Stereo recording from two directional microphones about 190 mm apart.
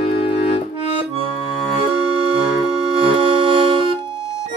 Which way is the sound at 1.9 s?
30° right (ahead or behind).